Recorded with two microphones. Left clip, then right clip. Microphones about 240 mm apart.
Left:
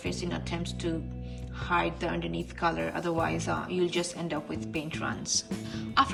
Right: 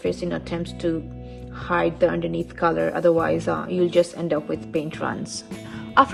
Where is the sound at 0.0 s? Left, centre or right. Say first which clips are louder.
Right 9 dB; centre.